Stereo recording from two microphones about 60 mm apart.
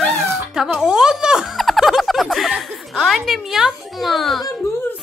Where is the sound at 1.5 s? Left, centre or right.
Centre.